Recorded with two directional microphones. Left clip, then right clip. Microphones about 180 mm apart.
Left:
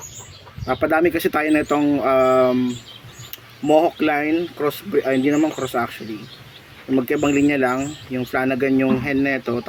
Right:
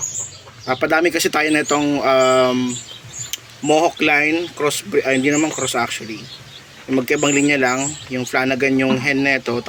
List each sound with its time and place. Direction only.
0.6 s speech: 15° left (ahead or behind)